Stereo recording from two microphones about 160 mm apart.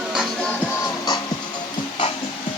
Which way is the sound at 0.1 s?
5° right (ahead or behind).